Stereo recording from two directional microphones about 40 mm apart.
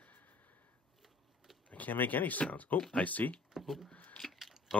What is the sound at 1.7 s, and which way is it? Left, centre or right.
Speech, left.